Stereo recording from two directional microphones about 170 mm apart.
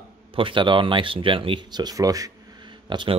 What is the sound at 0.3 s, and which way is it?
Speech, 30° right (ahead or behind).